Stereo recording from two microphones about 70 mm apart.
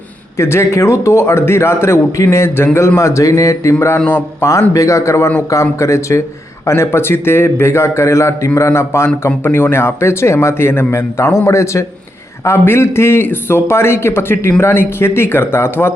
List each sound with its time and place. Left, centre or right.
0.3 s a man's voice: left
3.9 s a man's voice: left
4.7 s a man's voice: left